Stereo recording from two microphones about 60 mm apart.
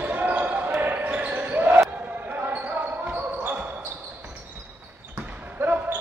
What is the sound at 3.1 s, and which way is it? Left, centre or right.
Basketball bounce, right.